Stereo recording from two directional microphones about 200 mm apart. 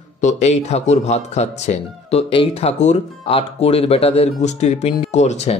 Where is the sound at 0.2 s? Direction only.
35° left (ahead or behind).